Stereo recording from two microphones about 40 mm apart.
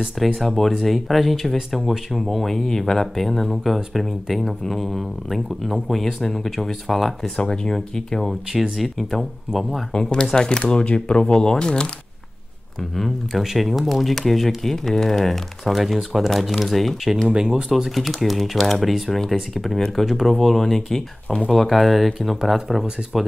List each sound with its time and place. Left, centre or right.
0.4 s speech: centre
7.3 s speech: centre
8.3 s speech: centre
9.9 s speech: centre
12.9 s speech: centre